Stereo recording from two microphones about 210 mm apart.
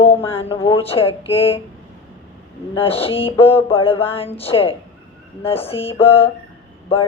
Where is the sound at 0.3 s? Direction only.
25° left (ahead or behind).